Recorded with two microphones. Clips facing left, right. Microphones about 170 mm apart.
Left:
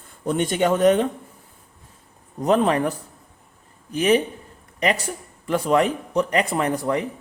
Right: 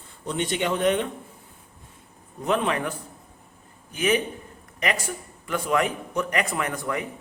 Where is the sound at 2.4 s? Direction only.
40° left (ahead or behind).